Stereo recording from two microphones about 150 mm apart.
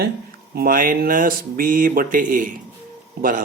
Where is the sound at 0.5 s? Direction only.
75° right (ahead or behind).